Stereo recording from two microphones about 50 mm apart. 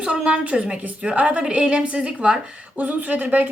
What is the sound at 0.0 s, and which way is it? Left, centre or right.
A woman's voice, right.